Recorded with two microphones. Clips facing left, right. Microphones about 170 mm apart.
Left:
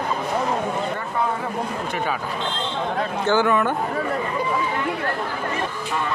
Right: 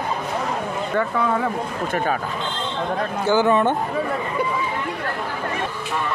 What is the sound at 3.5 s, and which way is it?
Speech, 25° right (ahead or behind).